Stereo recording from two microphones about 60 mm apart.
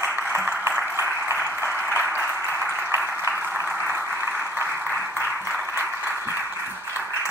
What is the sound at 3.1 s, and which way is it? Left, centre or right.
Applause, right.